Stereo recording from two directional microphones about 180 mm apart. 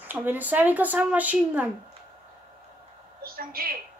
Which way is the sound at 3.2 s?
55° right (ahead or behind).